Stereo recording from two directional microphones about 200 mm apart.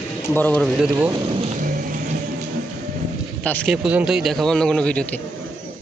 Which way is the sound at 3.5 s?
5° left (ahead or behind).